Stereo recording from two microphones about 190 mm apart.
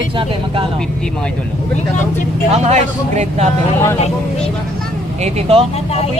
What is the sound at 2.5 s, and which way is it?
Speech, 35° right (ahead or behind).